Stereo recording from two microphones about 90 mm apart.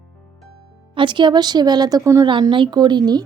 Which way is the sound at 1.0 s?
60° right (ahead or behind).